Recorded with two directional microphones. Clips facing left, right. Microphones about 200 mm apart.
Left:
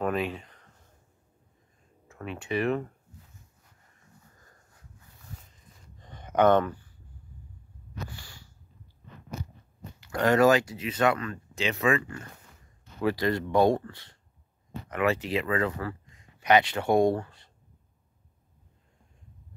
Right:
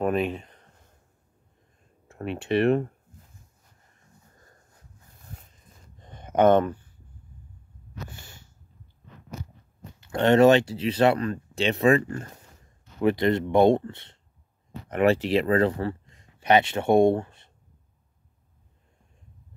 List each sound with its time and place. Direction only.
0.0 s speech: 20° right (ahead or behind)
2.2 s speech: 65° right (ahead or behind)
6.2 s speech: 20° right (ahead or behind)
8.1 s sniff: 20° right (ahead or behind)
9.9 s speech: 25° right (ahead or behind)
13.0 s speech: 20° right (ahead or behind)